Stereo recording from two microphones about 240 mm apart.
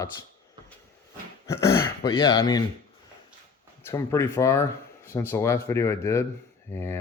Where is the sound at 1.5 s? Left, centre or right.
Centre.